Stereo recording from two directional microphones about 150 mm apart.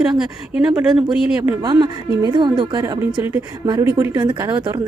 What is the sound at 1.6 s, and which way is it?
A woman's voice, 25° right (ahead or behind).